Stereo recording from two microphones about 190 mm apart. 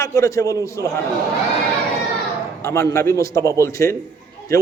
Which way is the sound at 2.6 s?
15° left (ahead or behind).